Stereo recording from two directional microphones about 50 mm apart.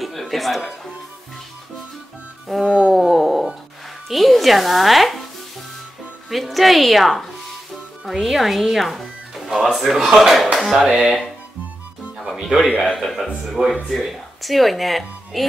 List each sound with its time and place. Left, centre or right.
0.0 s music: centre
2.6 s wail: centre
3.1 s a sound: centre
4.1 s speech: centre
6.3 s speech: centre
12.3 s speech: centre
12.8 s speech: centre